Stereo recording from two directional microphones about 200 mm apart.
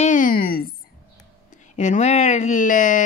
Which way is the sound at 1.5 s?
35° left (ahead or behind).